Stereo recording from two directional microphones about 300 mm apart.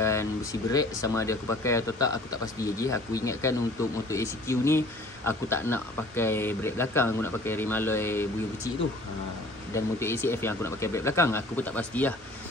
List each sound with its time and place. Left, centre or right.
0.0 s speech: centre
9.8 s speech: centre